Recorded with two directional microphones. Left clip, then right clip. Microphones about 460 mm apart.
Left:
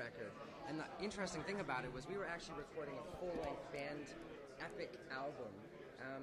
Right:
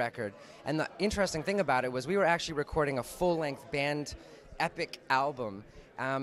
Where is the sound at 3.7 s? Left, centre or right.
Right.